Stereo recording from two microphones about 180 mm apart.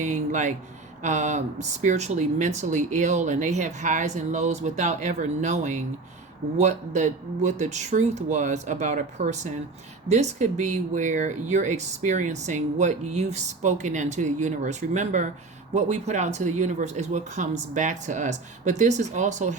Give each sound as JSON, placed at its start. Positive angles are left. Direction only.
{"t": 0.0, "sound": "speech", "side_deg": -40}